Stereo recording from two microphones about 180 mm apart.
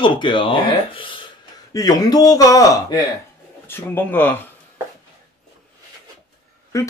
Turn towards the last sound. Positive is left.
turn(degrees=15)  # may be behind; listen again after turning